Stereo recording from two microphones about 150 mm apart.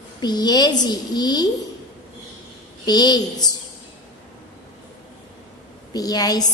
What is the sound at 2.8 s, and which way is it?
Speech, 30° left (ahead or behind).